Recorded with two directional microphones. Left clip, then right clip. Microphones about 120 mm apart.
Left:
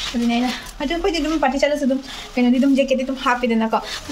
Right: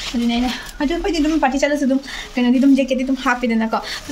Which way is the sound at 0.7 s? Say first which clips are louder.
Right 1 dB; 15° left (ahead or behind).